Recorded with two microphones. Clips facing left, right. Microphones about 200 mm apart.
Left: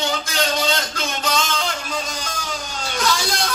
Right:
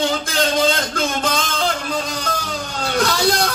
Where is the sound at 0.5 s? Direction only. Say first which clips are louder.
Right 5 dB; 50° right (ahead or behind).